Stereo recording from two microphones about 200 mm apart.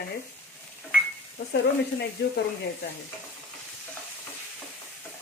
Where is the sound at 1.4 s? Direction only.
60° left (ahead or behind).